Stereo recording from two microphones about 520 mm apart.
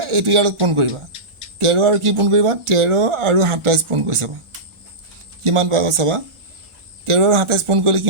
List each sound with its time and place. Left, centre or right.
0.0 s a man's voice: right
5.4 s speech: right